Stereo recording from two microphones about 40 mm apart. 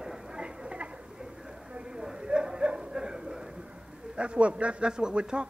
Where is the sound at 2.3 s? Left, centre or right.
Right.